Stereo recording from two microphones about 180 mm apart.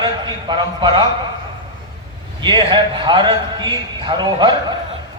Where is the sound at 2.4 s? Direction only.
25° right (ahead or behind).